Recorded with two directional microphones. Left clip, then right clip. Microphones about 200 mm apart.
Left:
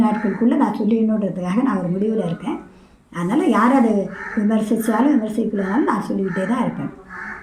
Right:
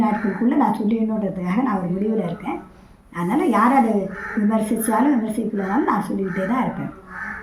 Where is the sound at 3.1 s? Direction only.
5° left (ahead or behind).